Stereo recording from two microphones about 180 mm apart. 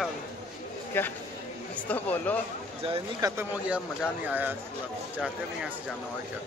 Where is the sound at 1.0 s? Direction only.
10° left (ahead or behind).